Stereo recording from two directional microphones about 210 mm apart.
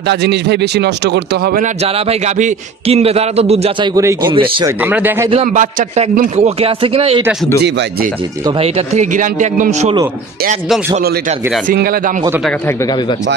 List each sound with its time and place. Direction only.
0.1 s speech: 55° right (ahead or behind)
1.8 s speech: 30° right (ahead or behind)
3.9 s a man's voice: 15° right (ahead or behind)
4.8 s a man's voice: 10° right (ahead or behind)
5.3 s speech: 35° right (ahead or behind)
7.5 s speech: 50° right (ahead or behind)
8.5 s a man's voice: 30° right (ahead or behind)
11.6 s speech: 45° right (ahead or behind)